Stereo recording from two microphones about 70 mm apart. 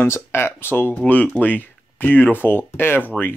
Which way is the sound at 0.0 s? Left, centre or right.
Left.